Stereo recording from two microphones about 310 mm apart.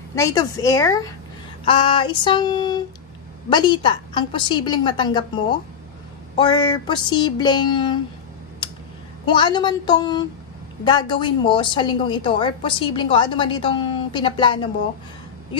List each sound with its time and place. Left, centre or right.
0.1 s a woman's voice: centre
9.2 s a woman's voice: centre